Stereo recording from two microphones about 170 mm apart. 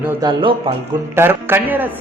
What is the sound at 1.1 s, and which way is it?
Speech, 15° right (ahead or behind).